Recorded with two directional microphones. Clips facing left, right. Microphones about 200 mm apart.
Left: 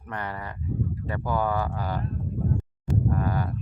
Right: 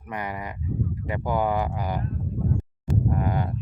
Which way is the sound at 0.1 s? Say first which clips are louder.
Right 2 dB; 10° right (ahead or behind).